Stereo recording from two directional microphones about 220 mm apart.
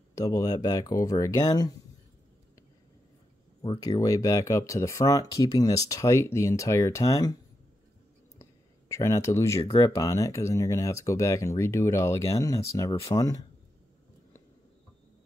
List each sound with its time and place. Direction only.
0.1 s speech: 15° left (ahead or behind)
3.6 s speech: 15° left (ahead or behind)
8.4 s speech: 15° left (ahead or behind)